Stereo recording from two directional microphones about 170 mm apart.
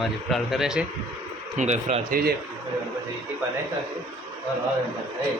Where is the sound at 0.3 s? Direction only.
Centre (ahead or behind).